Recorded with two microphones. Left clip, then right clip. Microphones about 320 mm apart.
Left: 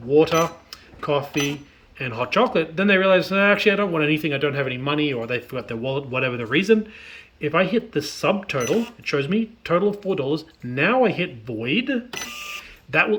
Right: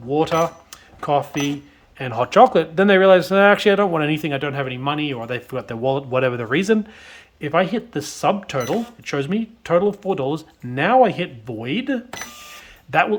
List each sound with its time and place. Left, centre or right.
0.1 s speech: centre